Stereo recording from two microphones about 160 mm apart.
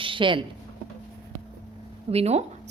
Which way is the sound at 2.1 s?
40° right (ahead or behind).